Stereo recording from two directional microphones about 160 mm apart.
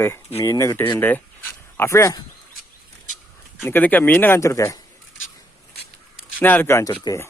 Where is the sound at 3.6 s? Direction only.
10° left (ahead or behind).